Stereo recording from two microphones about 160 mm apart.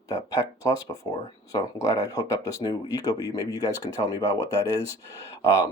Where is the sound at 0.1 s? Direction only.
20° left (ahead or behind).